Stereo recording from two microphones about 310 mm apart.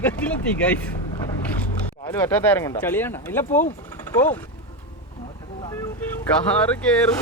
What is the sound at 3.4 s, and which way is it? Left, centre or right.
Speech, left.